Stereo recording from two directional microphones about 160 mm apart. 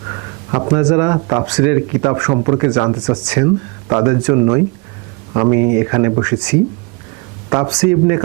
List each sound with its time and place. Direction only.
0.5 s speech: 20° right (ahead or behind)
7.7 s speech: 15° right (ahead or behind)